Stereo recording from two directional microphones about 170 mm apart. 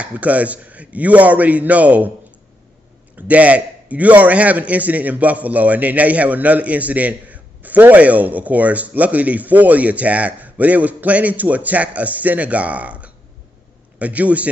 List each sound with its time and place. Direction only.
0.0 s a man's voice: 10° right (ahead or behind)
3.2 s a man's voice: 10° right (ahead or behind)